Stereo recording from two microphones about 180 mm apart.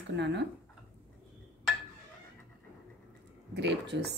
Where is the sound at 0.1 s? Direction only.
75° right (ahead or behind).